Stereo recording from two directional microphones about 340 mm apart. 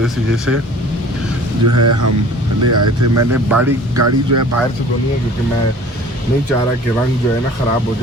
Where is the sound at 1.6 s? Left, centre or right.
Right.